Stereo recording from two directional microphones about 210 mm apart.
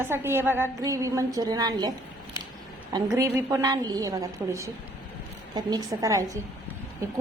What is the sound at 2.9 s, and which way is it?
A woman's voice, 15° right (ahead or behind).